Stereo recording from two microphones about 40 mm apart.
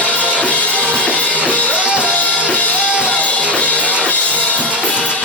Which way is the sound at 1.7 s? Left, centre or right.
Right.